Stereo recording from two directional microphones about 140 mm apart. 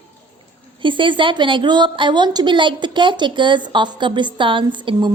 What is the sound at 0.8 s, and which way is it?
A woman's voice, 35° right (ahead or behind).